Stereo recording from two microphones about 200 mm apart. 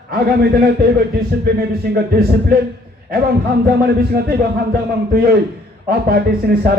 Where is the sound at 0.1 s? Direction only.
50° right (ahead or behind).